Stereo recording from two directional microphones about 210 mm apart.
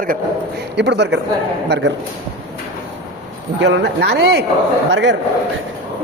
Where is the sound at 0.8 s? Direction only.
55° right (ahead or behind).